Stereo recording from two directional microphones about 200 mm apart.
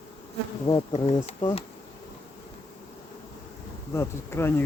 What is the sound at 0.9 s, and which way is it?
Speech, 30° left (ahead or behind).